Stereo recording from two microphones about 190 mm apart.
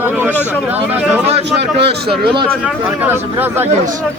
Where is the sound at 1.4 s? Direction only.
65° right (ahead or behind).